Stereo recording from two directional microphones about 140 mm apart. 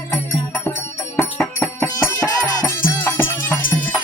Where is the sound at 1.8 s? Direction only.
15° left (ahead or behind).